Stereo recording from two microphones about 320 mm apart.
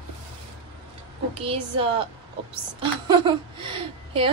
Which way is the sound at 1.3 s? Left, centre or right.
Centre.